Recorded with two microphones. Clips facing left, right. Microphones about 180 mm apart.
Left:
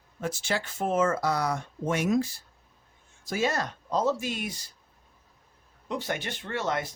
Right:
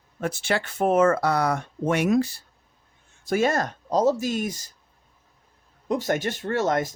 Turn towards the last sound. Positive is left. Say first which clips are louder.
# right 7 dB
turn(degrees=-45)  # may be behind; listen again after turning